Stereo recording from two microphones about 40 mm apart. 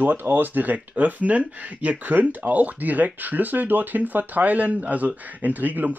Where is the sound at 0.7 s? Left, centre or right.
Right.